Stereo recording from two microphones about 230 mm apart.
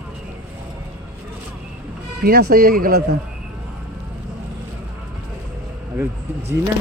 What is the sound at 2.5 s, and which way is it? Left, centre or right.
Speech, right.